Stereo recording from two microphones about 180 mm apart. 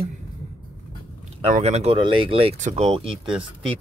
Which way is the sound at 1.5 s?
35° right (ahead or behind).